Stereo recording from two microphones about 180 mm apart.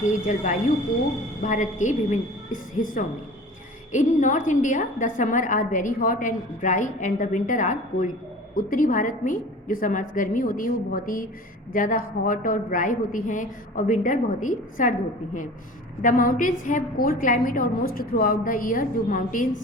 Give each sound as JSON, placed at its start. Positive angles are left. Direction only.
{"t": 0.0, "sound": "a woman's voice", "side_deg": 45}
{"t": 16.0, "sound": "a woman's voice", "side_deg": 50}